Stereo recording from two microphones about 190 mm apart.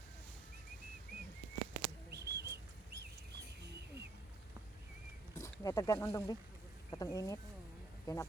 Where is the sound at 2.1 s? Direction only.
60° right (ahead or behind).